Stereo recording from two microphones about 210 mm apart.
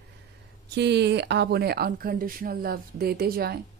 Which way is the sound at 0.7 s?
55° right (ahead or behind).